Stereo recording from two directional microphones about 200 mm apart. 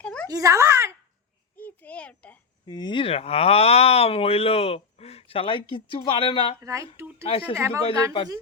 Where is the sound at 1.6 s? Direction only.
5° left (ahead or behind).